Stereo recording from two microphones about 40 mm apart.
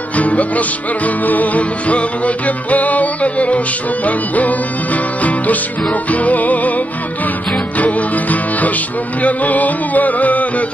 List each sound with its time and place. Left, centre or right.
0.1 s music: left
7.7 s music: left